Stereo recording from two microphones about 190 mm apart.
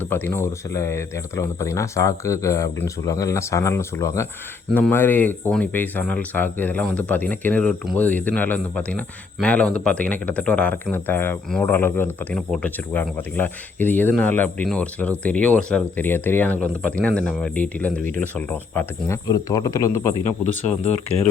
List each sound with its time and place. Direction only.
0.0 s speech: 10° left (ahead or behind)